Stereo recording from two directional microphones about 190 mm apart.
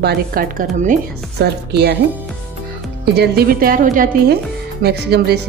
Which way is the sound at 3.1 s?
55° right (ahead or behind).